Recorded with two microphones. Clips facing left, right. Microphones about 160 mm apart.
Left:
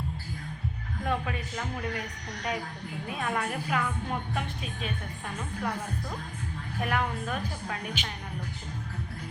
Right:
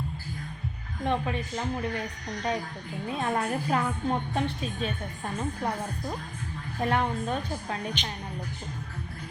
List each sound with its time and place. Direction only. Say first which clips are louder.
1.0 s a woman's voice: right 3 dB; 25° right (ahead or behind)
3.2 s a woman's voice: right 3 dB; 35° right (ahead or behind)
8.0 s speech: right 1 dB; 5° left (ahead or behind)